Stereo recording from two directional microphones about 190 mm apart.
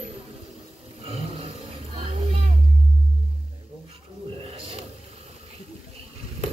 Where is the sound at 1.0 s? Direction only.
30° right (ahead or behind).